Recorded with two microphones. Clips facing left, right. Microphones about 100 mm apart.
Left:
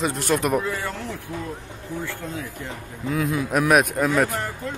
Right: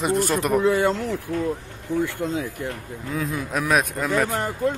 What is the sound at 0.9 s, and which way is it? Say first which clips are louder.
Speech: right 7 dB; 15° right (ahead or behind).